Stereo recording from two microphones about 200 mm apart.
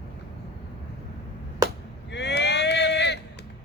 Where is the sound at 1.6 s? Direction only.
15° right (ahead or behind).